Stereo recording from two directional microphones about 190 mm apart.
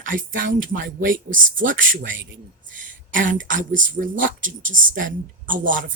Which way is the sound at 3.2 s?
45° right (ahead or behind).